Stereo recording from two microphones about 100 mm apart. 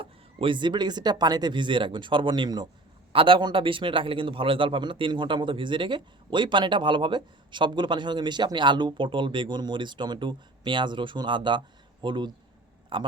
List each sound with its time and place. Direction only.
0.0 s a man's voice: 60° right (ahead or behind)
3.1 s a man's voice: 60° right (ahead or behind)